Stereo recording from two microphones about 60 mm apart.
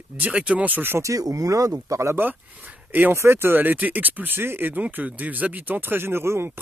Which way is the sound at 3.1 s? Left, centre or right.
Right.